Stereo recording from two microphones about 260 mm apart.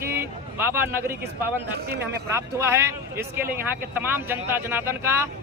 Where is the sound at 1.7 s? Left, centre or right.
Right.